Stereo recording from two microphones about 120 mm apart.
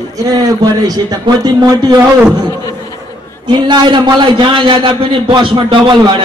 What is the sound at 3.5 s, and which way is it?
A man's voice, 40° right (ahead or behind).